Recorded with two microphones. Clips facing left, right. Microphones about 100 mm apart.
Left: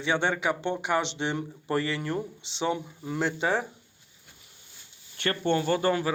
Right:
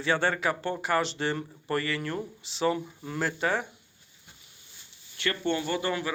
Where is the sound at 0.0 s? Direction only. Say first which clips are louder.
Even; 15° left (ahead or behind).